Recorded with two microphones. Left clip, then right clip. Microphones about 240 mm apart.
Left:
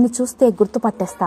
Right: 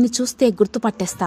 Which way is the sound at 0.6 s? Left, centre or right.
Right.